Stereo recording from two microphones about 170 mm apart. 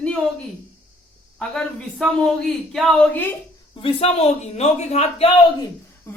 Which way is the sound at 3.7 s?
35° left (ahead or behind).